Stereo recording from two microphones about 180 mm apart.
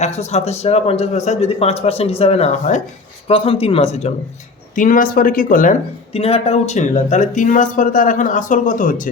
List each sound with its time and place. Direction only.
0.0 s speech: 40° left (ahead or behind)
3.2 s speech: 30° left (ahead or behind)
4.7 s speech: 45° left (ahead or behind)
6.1 s speech: 35° left (ahead or behind)